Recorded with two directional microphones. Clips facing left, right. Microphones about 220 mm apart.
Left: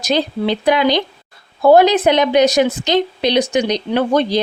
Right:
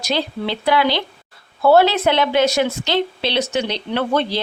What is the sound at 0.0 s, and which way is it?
Speech, 20° left (ahead or behind).